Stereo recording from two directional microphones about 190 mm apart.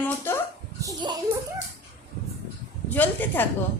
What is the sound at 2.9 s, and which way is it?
Speech, 10° left (ahead or behind).